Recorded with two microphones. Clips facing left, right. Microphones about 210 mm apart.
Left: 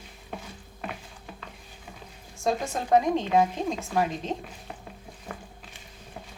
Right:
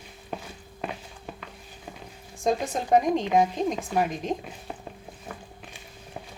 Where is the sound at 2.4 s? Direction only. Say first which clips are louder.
Right 2 dB; 20° right (ahead or behind).